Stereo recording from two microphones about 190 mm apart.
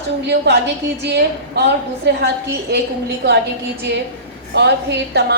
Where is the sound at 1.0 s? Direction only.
60° right (ahead or behind).